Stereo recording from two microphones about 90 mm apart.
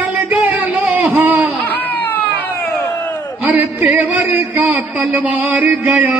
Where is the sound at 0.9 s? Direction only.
15° right (ahead or behind).